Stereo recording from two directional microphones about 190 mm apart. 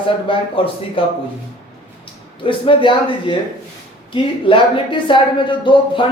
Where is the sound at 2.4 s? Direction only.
25° left (ahead or behind).